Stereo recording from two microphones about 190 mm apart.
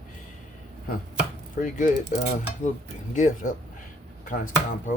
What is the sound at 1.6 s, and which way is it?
Speech, 45° left (ahead or behind).